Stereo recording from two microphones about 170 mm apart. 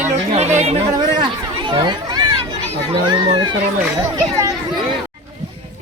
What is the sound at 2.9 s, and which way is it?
Speech, 25° right (ahead or behind).